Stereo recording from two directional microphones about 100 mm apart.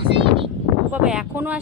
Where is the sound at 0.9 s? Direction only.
10° right (ahead or behind).